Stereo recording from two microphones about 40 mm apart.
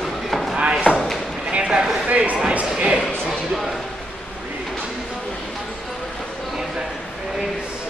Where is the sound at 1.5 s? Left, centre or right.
Right.